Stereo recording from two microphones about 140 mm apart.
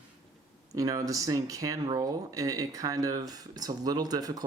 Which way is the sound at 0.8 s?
25° right (ahead or behind).